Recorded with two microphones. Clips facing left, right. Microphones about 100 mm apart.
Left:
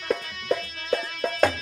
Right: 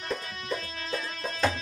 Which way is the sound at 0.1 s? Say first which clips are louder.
Left 8 dB; 60° left (ahead or behind).